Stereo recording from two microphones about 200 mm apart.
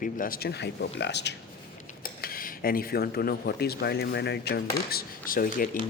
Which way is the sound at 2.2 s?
45° left (ahead or behind).